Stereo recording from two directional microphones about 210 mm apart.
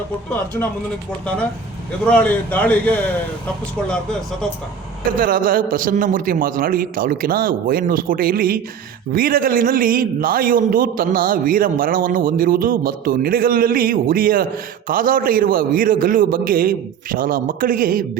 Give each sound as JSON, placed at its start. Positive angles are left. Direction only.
{"t": 2.0, "sound": "a man's voice", "side_deg": 5}
{"t": 5.2, "sound": "a man's voice", "side_deg": -40}